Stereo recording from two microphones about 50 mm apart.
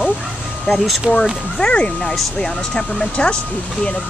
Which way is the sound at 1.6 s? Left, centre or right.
Left.